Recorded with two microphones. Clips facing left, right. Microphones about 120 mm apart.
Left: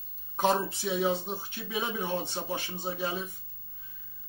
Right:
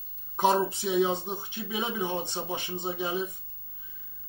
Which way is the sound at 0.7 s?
20° right (ahead or behind).